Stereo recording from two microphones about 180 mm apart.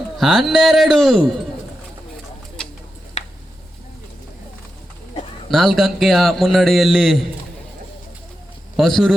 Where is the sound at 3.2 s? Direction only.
40° left (ahead or behind).